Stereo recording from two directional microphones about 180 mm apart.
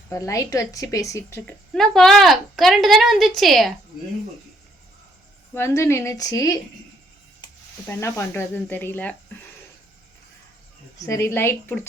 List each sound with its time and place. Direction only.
0.1 s speech: 15° left (ahead or behind)
1.7 s a woman's voice: centre (ahead or behind)
5.5 s speech: 15° left (ahead or behind)
7.9 s speech: 15° left (ahead or behind)
10.9 s speech: 15° left (ahead or behind)